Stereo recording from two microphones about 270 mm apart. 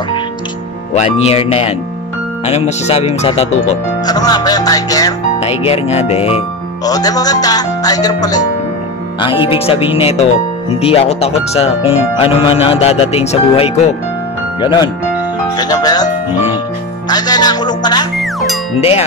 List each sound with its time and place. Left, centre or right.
0.9 s speech: left
17.1 s speech: centre
18.2 s music: centre
18.8 s speech: left